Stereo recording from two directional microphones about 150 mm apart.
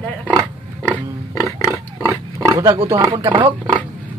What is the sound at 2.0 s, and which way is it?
Pig, 25° right (ahead or behind).